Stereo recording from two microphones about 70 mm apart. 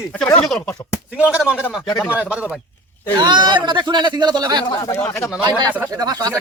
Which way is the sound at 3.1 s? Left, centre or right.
Right.